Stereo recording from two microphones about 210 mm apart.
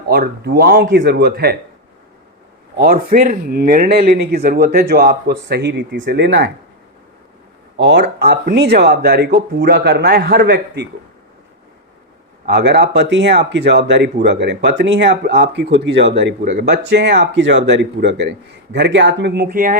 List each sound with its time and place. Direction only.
0.1 s speech: 45° right (ahead or behind)
2.7 s speech: 45° right (ahead or behind)
7.8 s speech: 55° right (ahead or behind)
12.5 s speech: 55° right (ahead or behind)